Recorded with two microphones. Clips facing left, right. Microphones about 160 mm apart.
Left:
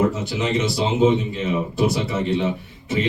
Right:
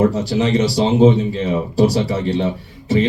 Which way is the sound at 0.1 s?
35° right (ahead or behind).